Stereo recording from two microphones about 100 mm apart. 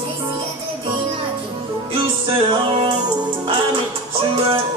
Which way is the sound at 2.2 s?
60° right (ahead or behind).